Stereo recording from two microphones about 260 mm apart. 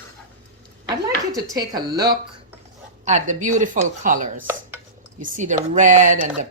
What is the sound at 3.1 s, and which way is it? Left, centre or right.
Speech, right.